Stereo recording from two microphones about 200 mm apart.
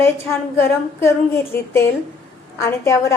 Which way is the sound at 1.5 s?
15° left (ahead or behind).